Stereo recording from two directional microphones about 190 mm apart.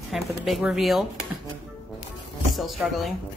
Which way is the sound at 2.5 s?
Centre (ahead or behind).